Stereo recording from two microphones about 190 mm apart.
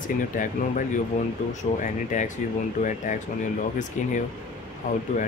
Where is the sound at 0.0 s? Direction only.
45° left (ahead or behind).